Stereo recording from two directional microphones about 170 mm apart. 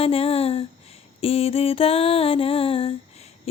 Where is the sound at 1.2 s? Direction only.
35° left (ahead or behind).